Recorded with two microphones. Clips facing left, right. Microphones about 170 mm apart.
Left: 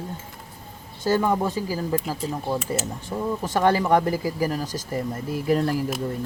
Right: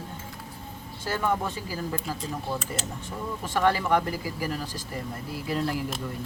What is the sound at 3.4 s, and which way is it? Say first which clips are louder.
Speech: left 3 dB; 40° left (ahead or behind).